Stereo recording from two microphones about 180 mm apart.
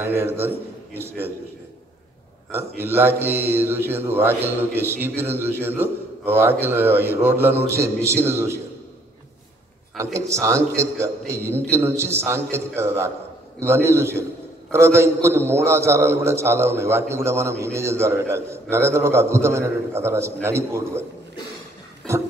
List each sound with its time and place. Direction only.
0.0 s speech: 15° right (ahead or behind)
2.5 s speech: 15° right (ahead or behind)
10.1 s speech: 15° right (ahead or behind)